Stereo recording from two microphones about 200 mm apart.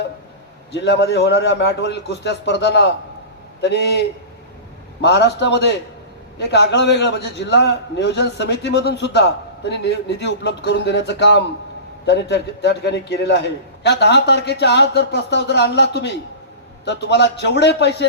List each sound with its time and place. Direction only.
0.7 s a man's voice: 60° left (ahead or behind)